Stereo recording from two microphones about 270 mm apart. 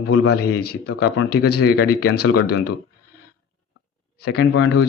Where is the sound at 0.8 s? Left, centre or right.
Left.